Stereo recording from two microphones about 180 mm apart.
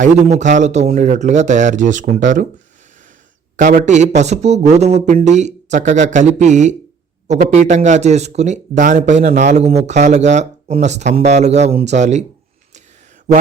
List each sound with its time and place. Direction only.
0.0 s speech: 40° right (ahead or behind)
3.6 s speech: 50° right (ahead or behind)